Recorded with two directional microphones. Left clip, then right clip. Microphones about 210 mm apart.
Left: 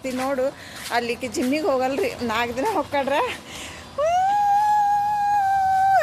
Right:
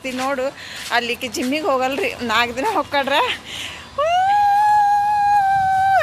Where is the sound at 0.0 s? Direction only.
Centre (ahead or behind).